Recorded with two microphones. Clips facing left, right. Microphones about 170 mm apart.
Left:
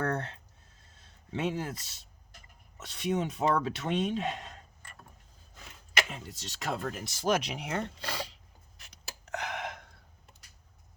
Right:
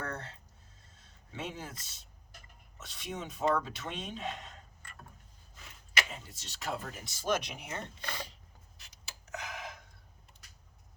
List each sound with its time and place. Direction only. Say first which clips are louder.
0.0 s a sound: left 8 dB; 70° left (ahead or behind)
1.3 s speech: left 9 dB; 70° left (ahead or behind)
6.1 s speech: left 5 dB; 75° left (ahead or behind)
8.9 s gasp: left 5 dB; 70° left (ahead or behind)